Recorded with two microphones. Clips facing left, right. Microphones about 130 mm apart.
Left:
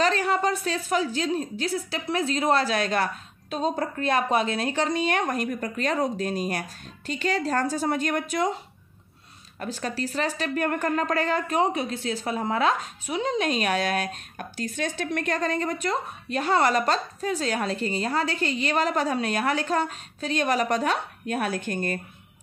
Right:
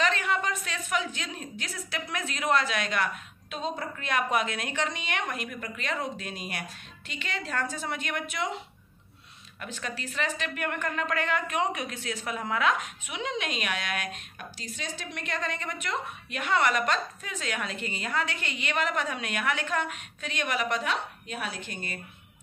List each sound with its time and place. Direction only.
0.0 s a woman's voice: 35° left (ahead or behind)
9.6 s a woman's voice: 35° left (ahead or behind)
14.6 s a woman's voice: 55° left (ahead or behind)